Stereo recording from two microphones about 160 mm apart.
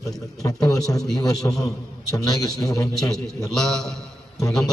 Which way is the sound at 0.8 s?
Centre (ahead or behind).